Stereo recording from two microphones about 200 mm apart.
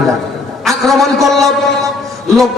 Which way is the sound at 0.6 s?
Centre (ahead or behind).